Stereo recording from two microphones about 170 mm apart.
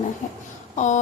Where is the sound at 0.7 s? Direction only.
45° left (ahead or behind).